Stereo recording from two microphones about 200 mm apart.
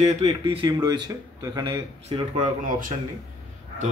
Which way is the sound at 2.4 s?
45° right (ahead or behind).